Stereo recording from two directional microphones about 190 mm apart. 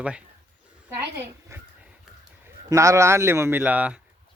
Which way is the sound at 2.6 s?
15° right (ahead or behind).